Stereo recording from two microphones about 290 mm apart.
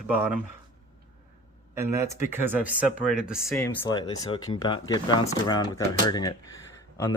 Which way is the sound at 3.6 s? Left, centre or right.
Centre.